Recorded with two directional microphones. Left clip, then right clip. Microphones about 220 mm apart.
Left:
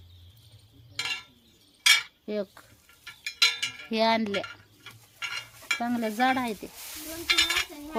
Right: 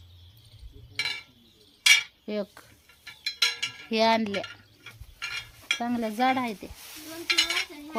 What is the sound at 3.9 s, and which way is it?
Stir, 5° right (ahead or behind).